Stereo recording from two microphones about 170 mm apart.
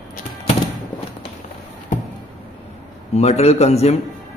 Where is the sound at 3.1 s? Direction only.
40° left (ahead or behind).